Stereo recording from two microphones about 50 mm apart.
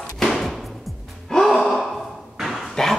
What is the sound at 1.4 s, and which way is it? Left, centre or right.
Gasp, centre.